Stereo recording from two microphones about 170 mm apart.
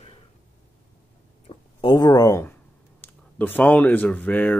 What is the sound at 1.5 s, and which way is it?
Speech, 30° left (ahead or behind).